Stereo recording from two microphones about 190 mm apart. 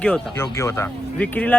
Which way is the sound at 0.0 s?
10° left (ahead or behind).